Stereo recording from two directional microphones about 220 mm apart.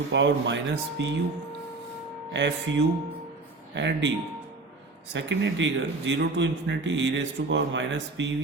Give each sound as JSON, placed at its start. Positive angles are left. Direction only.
{"t": 0.1, "sound": "speech", "side_deg": -55}
{"t": 2.3, "sound": "speech", "side_deg": -55}
{"t": 5.1, "sound": "speech", "side_deg": -55}